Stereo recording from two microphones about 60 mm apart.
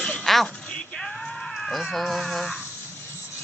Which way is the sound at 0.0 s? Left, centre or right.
Centre.